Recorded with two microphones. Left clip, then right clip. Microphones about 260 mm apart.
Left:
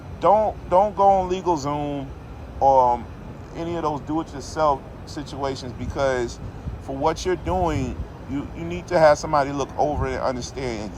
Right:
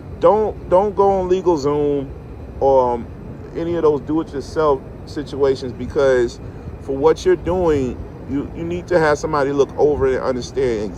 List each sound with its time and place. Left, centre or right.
0.2 s speech: left